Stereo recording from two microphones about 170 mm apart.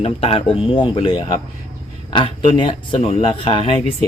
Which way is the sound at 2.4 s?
30° left (ahead or behind).